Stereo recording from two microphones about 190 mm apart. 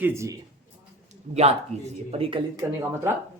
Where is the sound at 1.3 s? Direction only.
35° right (ahead or behind).